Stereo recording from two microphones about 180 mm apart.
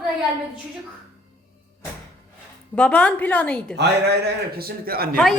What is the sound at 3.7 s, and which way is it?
A man's voice, 65° right (ahead or behind).